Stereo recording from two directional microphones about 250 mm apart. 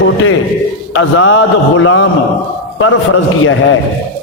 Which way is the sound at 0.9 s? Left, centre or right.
Left.